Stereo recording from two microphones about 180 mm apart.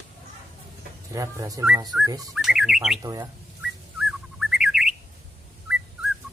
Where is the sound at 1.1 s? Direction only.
20° right (ahead or behind).